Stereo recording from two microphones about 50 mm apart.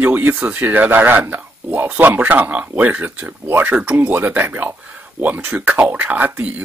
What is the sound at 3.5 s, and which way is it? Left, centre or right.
Speech, right.